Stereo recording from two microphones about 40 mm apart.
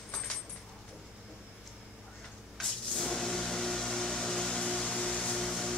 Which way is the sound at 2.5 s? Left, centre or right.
Centre.